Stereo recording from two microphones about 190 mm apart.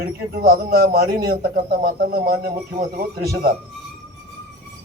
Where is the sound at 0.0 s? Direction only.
50° right (ahead or behind).